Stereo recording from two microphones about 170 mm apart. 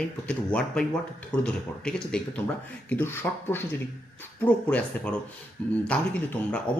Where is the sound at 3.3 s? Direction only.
10° left (ahead or behind).